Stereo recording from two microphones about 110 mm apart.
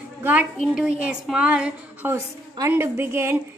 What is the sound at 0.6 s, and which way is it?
A woman's voice, 10° right (ahead or behind).